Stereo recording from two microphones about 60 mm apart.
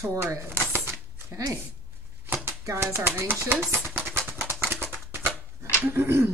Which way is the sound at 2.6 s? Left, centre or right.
Right.